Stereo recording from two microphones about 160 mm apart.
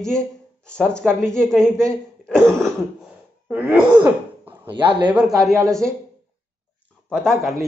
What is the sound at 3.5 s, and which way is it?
Groan, 10° right (ahead or behind).